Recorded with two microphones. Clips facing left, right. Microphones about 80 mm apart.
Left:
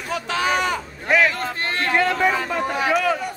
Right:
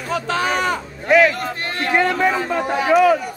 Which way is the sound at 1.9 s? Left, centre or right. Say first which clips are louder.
Right 2 dB; right.